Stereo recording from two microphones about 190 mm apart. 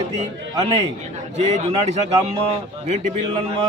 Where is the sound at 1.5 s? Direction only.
35° right (ahead or behind).